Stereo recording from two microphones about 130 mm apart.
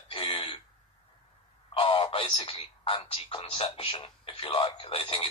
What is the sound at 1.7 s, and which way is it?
Speech, 45° left (ahead or behind).